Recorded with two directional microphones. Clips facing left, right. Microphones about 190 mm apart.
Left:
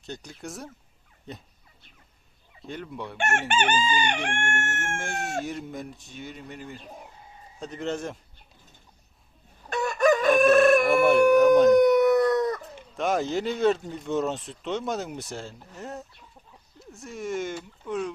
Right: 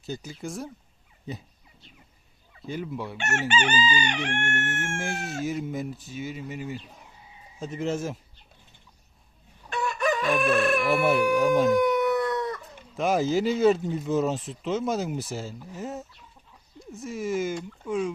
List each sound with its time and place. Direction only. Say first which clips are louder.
0.0 s speech: right 4 dB; 5° right (ahead or behind)
2.6 s speech: right 3 dB; centre (ahead or behind)
3.2 s chicken: left 2 dB; 50° left (ahead or behind)
4.9 s speech: even; 5° right (ahead or behind)
6.7 s speech: right 1 dB; 50° left (ahead or behind)
7.6 s speech: right 2 dB; centre (ahead or behind)
9.6 s chicken: left 5 dB; 45° left (ahead or behind)
11.0 s a sound: left 4 dB; centre (ahead or behind)
11.3 s howl: left 5 dB; centre (ahead or behind)
11.8 s chicken: left 5 dB; 40° left (ahead or behind)
12.9 s speech: right 2 dB; centre (ahead or behind)